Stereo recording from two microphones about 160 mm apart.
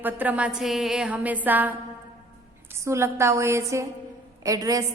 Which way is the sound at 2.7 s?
15° right (ahead or behind).